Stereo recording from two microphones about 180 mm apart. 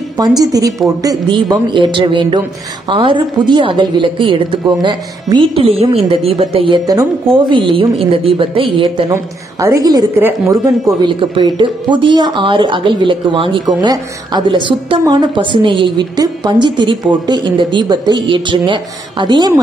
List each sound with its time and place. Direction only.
0.4 s speech: 20° right (ahead or behind)
9.1 s a woman's voice: 15° right (ahead or behind)